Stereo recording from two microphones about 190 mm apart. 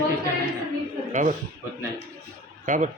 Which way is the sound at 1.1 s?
40° right (ahead or behind).